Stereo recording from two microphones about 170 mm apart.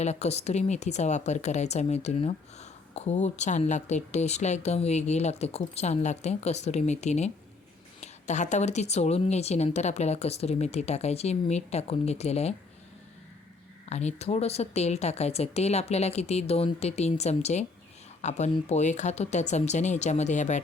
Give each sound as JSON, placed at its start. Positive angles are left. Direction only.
{"t": 0.0, "sound": "speech", "side_deg": 40}
{"t": 13.9, "sound": "speech", "side_deg": 40}